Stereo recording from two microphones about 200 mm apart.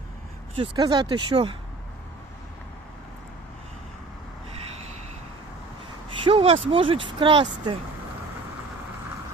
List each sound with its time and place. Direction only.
0.5 s speech: 25° right (ahead or behind)
6.1 s speech: 25° right (ahead or behind)